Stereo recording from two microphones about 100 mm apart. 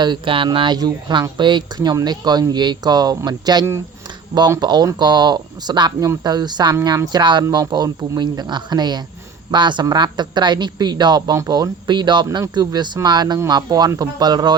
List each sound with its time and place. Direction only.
0.0 s speech: 55° right (ahead or behind)